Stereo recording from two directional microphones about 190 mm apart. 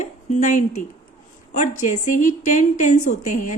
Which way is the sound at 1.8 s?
40° left (ahead or behind).